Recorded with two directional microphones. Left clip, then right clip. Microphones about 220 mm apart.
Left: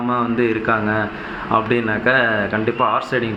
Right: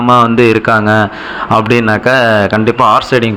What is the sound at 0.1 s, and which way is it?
A man's voice, 40° right (ahead or behind).